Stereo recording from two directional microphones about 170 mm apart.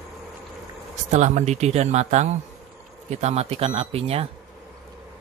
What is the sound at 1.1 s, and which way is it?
Speech, 45° right (ahead or behind).